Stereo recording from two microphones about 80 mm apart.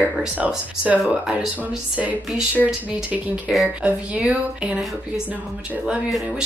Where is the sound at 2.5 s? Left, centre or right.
Centre.